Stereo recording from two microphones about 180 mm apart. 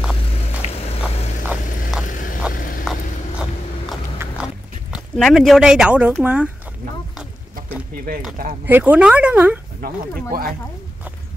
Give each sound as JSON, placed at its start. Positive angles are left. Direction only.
{"t": 0.7, "sound": "vehicle", "side_deg": 35}
{"t": 2.5, "sound": "vehicle", "side_deg": 50}
{"t": 4.2, "sound": "a sound", "side_deg": -15}
{"t": 4.9, "sound": "speech", "side_deg": 0}
{"t": 8.6, "sound": "speech", "side_deg": -10}
{"t": 9.8, "sound": "speech", "side_deg": -55}